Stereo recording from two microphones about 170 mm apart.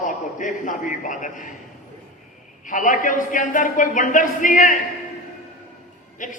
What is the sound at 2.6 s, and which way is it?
A man's voice, 50° left (ahead or behind).